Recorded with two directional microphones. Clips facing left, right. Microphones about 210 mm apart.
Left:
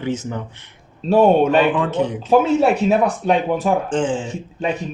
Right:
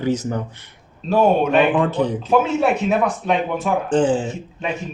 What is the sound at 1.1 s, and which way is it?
Speech, 30° left (ahead or behind).